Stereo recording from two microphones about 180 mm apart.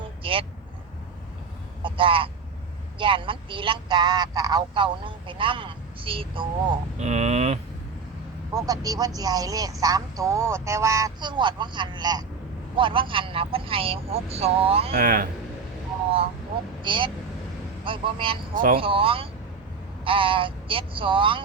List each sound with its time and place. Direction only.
0.2 s vehicle: 30° right (ahead or behind)
1.8 s speech: 30° right (ahead or behind)
8.5 s speech: 20° right (ahead or behind)
14.9 s speech: 55° right (ahead or behind)
16.8 s speech: 25° right (ahead or behind)
18.5 s speech: 50° right (ahead or behind)
18.8 s speech: 30° right (ahead or behind)